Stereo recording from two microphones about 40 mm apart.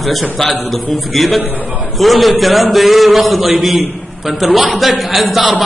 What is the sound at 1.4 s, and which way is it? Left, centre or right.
Speech, right.